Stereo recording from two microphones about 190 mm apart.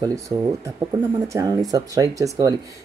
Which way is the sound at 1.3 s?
20° right (ahead or behind).